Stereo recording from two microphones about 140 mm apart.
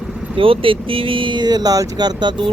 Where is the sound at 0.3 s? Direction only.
40° right (ahead or behind).